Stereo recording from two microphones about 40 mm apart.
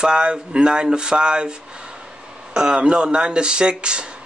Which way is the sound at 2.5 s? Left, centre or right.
Right.